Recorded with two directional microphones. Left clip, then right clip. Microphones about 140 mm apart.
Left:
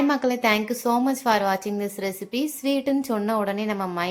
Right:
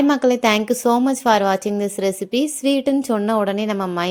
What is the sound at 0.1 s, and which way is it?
A woman's voice, 50° right (ahead or behind).